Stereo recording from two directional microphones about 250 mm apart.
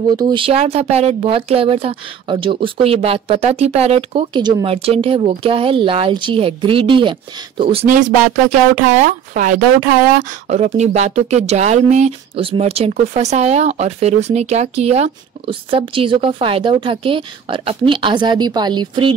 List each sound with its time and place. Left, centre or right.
0.1 s speech: centre